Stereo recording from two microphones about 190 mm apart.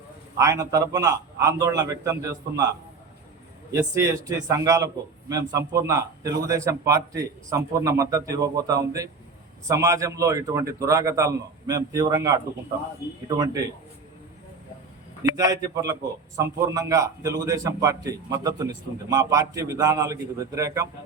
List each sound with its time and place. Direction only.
0.3 s a man's voice: 15° right (ahead or behind)
3.7 s a man's voice: 15° right (ahead or behind)
15.4 s a man's voice: 20° right (ahead or behind)